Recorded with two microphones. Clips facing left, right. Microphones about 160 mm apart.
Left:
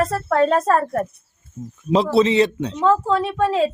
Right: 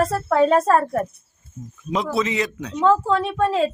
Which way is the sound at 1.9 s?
30° left (ahead or behind).